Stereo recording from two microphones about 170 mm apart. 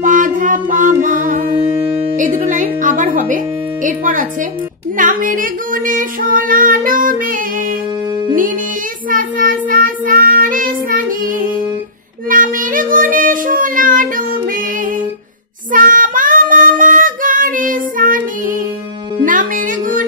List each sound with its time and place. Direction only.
0.0 s music: 50° right (ahead or behind)
2.1 s female singing: 50° right (ahead or behind)
9.1 s child singing: 55° right (ahead or behind)
15.7 s child singing: 55° right (ahead or behind)
19.2 s music: 50° right (ahead or behind)